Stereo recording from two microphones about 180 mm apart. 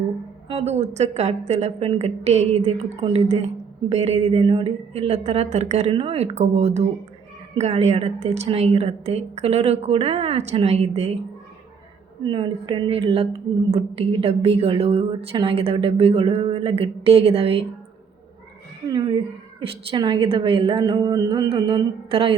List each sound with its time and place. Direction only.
0.4 s a woman's voice: 35° right (ahead or behind)
12.2 s a woman's voice: 25° right (ahead or behind)
18.9 s a woman's voice: 25° right (ahead or behind)